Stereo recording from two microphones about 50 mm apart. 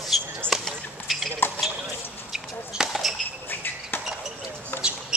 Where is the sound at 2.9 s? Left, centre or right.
Centre.